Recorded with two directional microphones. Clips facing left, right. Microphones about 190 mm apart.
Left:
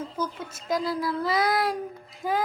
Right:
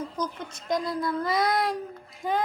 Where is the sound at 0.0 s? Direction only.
5° left (ahead or behind).